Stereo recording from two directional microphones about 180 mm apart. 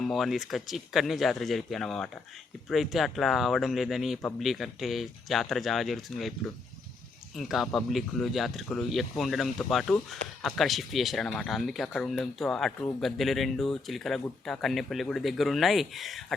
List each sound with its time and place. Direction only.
0.0 s speech: centre (ahead or behind)
7.3 s speech: centre (ahead or behind)